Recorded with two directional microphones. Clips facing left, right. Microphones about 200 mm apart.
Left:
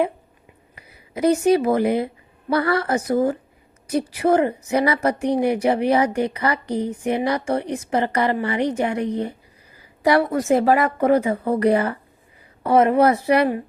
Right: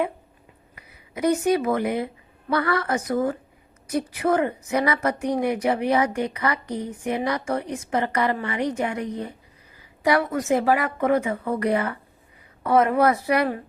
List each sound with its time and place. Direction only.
0.8 s a woman's voice: 30° left (ahead or behind)